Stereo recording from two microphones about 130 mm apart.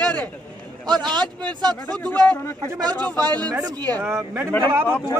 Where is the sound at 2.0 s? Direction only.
10° left (ahead or behind).